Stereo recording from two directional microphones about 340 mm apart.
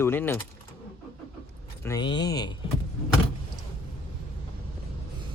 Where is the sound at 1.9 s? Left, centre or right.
Centre.